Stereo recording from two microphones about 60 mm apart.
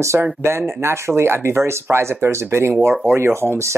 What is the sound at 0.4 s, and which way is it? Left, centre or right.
Speech, right.